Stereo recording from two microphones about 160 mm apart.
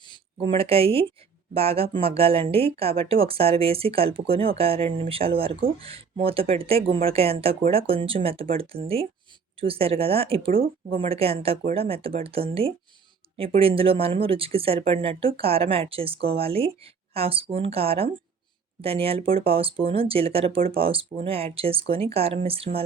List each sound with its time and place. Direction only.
0.3 s speech: 35° right (ahead or behind)